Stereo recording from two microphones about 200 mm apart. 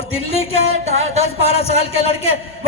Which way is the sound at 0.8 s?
35° right (ahead or behind).